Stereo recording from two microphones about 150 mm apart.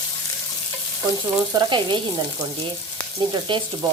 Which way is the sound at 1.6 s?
30° right (ahead or behind).